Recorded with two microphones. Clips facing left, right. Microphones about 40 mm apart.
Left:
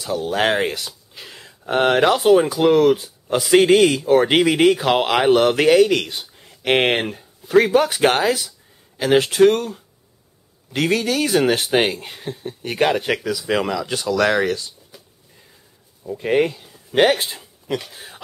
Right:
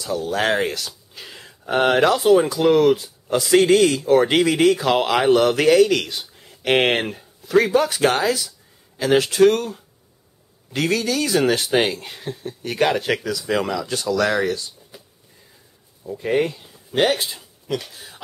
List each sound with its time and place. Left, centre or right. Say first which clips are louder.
0.3 s speech: left 1 dB; centre
1.2 s a sound: left 1 dB; centre
2.0 s speech: left 1 dB; centre
3.3 s speech: left 1 dB; centre
7.4 s speech: left 2 dB; centre
9.5 s speech: left 1 dB; centre
10.8 s speech: left 2 dB; centre
14.9 s a sound: right 1 dB; centre
16.3 s speech: left 3 dB; centre
16.9 s speech: left 3 dB; left